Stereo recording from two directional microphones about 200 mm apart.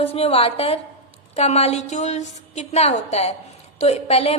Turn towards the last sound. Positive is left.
turn(degrees=30)  # may be behind; listen again after turning